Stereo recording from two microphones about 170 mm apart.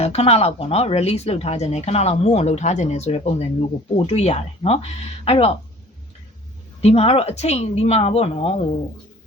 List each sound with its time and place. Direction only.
0.0 s speech: 35° left (ahead or behind)
6.8 s speech: 35° left (ahead or behind)